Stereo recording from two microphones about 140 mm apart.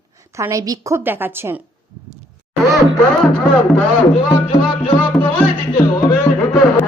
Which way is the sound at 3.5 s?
35° left (ahead or behind).